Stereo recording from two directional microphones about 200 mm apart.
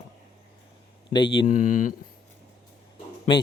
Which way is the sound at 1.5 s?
40° left (ahead or behind).